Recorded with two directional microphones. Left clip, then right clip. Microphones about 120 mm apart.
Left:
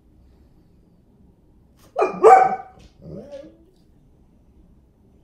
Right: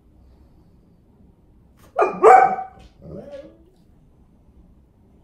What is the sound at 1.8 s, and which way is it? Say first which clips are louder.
Dog: even; 20° right (ahead or behind).